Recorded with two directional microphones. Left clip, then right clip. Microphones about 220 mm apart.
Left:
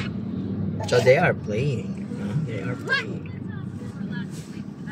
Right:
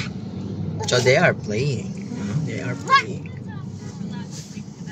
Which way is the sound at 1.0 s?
25° right (ahead or behind).